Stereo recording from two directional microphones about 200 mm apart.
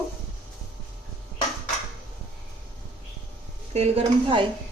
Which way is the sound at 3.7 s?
30° right (ahead or behind).